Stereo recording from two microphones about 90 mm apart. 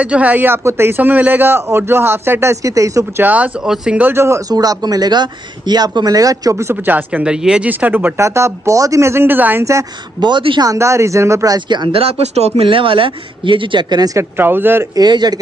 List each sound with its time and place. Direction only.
0.0 s a man's voice: 15° right (ahead or behind); by 3.1 s 35° right (ahead or behind)
3.2 s speech: 20° right (ahead or behind)
3.6 s speech: 5° right (ahead or behind)
4.0 s a man's voice: 30° right (ahead or behind)
4.5 s speech: 45° right (ahead or behind); by 8.1 s 20° right (ahead or behind)
8.2 s speech: 30° right (ahead or behind)
10.2 s speech: 60° right (ahead or behind)
10.6 s speech: 35° right (ahead or behind)
11.7 s speech: 75° right (ahead or behind); by 14.1 s 50° right (ahead or behind)
14.1 s a man's voice: 25° right (ahead or behind)
15.0 s speech: 50° right (ahead or behind)